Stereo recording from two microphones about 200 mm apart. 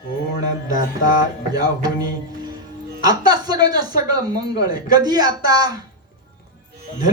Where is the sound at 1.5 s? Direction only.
20° right (ahead or behind).